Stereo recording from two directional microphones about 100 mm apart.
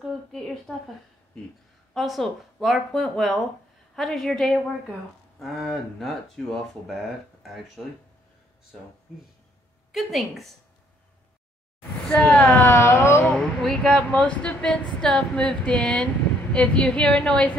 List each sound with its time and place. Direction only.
0.1 s a woman's voice: centre (ahead or behind)
2.0 s speech: centre (ahead or behind)
9.9 s speech: centre (ahead or behind)
12.3 s speech: 15° left (ahead or behind)
12.6 s music: 30° left (ahead or behind)
13.3 s speech: 5° left (ahead or behind)